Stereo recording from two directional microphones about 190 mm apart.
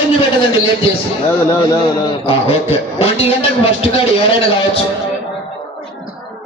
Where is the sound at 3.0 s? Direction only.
30° left (ahead or behind).